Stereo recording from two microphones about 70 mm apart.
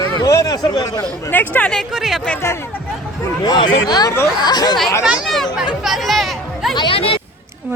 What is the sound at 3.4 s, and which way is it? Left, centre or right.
Speech, left.